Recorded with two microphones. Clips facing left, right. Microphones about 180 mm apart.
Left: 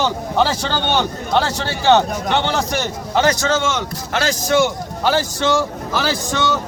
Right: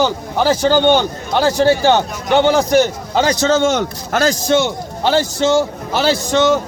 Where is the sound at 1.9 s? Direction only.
10° right (ahead or behind).